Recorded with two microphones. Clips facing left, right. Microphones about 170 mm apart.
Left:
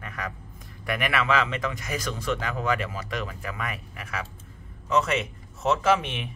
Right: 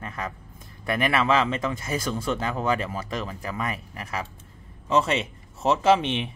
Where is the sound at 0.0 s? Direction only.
30° right (ahead or behind).